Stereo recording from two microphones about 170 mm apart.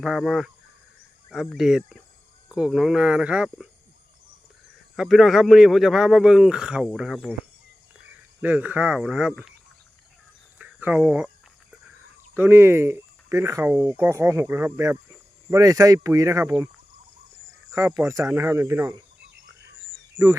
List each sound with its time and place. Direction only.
0.0 s a man's voice: centre (ahead or behind)
4.9 s a man's voice: centre (ahead or behind)
8.4 s speech: 10° right (ahead or behind)
10.6 s speech: 10° right (ahead or behind)
12.3 s speech: 15° right (ahead or behind)
17.7 s cricket: 15° right (ahead or behind)
18.0 s speech: 15° right (ahead or behind)